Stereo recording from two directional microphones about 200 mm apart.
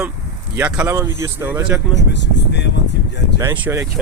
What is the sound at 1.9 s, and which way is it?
Speech, 60° left (ahead or behind).